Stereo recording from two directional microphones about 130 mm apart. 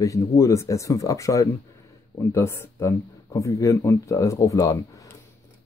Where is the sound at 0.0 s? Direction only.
25° left (ahead or behind).